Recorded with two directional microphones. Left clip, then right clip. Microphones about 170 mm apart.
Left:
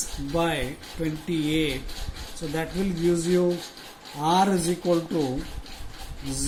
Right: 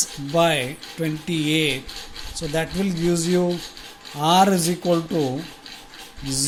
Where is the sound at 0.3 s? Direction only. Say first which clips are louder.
Right 7 dB; 45° right (ahead or behind).